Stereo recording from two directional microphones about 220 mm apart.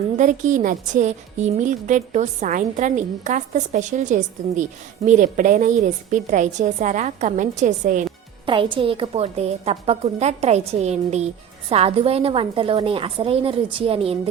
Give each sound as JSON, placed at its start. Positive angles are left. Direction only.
{"t": 0.2, "sound": "a woman's voice", "side_deg": -35}
{"t": 8.4, "sound": "a woman's voice", "side_deg": -20}